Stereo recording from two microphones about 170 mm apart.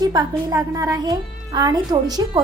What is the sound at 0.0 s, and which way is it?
A woman's voice, 20° right (ahead or behind).